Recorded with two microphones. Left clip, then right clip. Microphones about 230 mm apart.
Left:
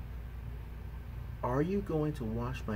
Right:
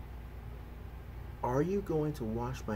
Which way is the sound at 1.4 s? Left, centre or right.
Centre.